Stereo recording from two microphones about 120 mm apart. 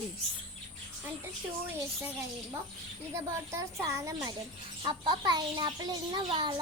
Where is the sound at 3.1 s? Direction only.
25° right (ahead or behind).